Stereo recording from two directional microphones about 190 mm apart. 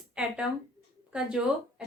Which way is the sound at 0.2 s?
5° right (ahead or behind).